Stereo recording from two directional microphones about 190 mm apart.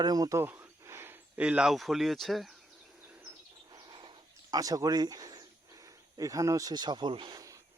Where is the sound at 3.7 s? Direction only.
25° right (ahead or behind).